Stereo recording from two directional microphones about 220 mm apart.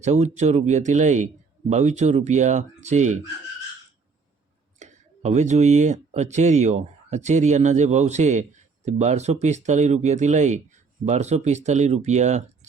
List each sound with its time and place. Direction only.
0.0 s speech: 30° right (ahead or behind)
4.8 s speech: 30° right (ahead or behind)